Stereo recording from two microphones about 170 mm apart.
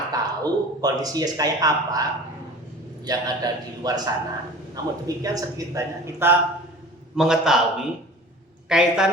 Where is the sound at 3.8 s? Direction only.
25° right (ahead or behind).